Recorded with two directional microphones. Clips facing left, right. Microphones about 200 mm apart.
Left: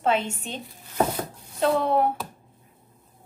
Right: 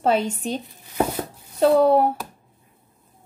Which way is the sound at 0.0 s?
40° right (ahead or behind).